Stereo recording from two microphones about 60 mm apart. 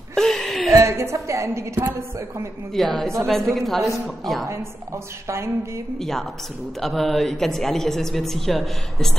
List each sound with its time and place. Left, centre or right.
0.1 s a sound: centre
0.7 s a woman's voice: right
2.7 s a woman's voice: centre
4.5 s a woman's voice: right
5.9 s a woman's voice: centre